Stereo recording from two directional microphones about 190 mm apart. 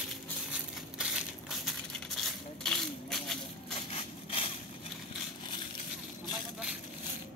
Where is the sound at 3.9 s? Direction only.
30° left (ahead or behind).